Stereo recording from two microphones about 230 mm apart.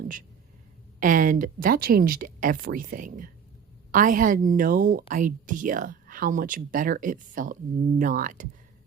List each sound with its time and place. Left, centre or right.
0.9 s a woman's voice: right